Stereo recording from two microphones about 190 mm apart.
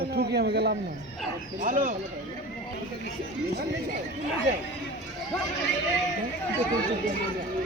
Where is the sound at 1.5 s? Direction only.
45° right (ahead or behind).